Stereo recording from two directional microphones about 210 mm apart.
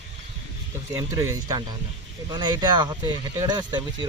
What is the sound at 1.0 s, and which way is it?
Speech, 15° right (ahead or behind).